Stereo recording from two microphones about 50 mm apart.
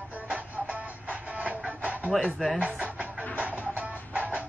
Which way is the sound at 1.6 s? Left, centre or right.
Right.